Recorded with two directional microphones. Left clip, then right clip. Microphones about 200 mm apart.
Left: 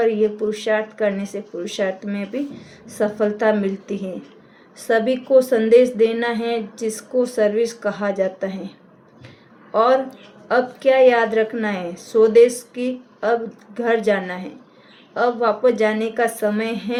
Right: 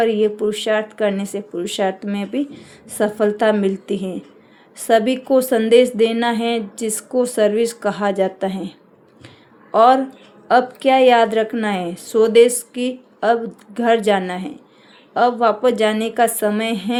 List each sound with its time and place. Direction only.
0.0 s a woman's voice: 40° right (ahead or behind)
9.7 s a woman's voice: 40° right (ahead or behind)